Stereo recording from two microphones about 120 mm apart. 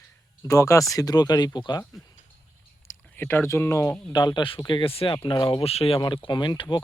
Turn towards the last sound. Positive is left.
turn(degrees=40)  # may be behind; listen again after turning